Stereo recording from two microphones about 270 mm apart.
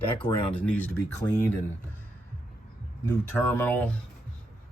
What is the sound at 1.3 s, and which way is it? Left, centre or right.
Speech, centre.